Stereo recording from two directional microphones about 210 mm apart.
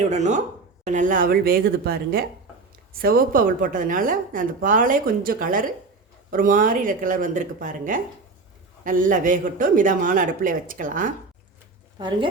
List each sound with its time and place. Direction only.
0.1 s a woman's voice: 35° right (ahead or behind)
11.9 s speech: 20° right (ahead or behind)